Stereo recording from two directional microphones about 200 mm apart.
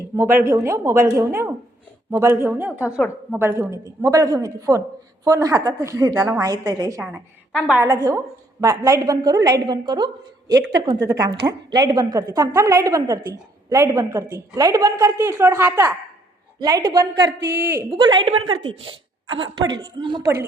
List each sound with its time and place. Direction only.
0.2 s a woman's voice: 10° right (ahead or behind)
17.2 s speech: 55° right (ahead or behind)
17.6 s a woman's voice: 10° right (ahead or behind)
18.0 s a woman's voice: 25° right (ahead or behind)